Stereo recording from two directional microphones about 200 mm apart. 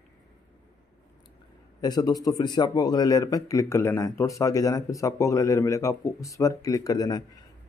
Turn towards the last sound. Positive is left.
turn(degrees=20)  # may be behind; listen again after turning